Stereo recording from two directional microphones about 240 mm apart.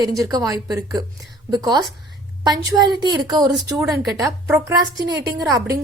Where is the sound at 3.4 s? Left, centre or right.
Centre.